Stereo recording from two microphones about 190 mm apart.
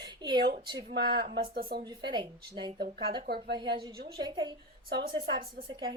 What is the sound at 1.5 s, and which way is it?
Speech, 50° right (ahead or behind).